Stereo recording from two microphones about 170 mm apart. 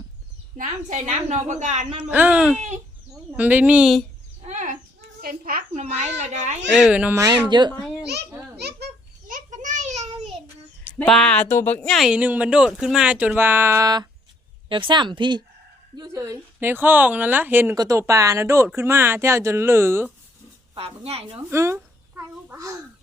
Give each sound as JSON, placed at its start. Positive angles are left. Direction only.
{"t": 0.5, "sound": "a woman's voice", "side_deg": -50}
{"t": 2.0, "sound": "speech", "side_deg": -10}
{"t": 4.4, "sound": "a sound", "side_deg": -45}
{"t": 5.2, "sound": "a child's voice", "side_deg": -55}
{"t": 6.7, "sound": "speech", "side_deg": -5}
{"t": 7.2, "sound": "a woman's voice", "side_deg": -25}
{"t": 7.7, "sound": "a child's voice", "side_deg": 0}
{"t": 8.5, "sound": "a sound", "side_deg": -70}
{"t": 10.9, "sound": "a woman's voice", "side_deg": 5}
{"t": 20.7, "sound": "speech", "side_deg": -35}
{"t": 21.5, "sound": "speech", "side_deg": -15}
{"t": 22.4, "sound": "babbling", "side_deg": -20}